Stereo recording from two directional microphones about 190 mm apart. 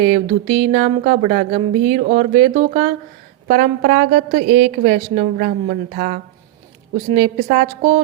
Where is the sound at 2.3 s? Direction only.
30° right (ahead or behind).